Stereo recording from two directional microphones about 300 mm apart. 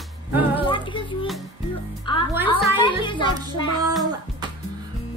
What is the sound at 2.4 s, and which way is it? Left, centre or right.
Speech, centre.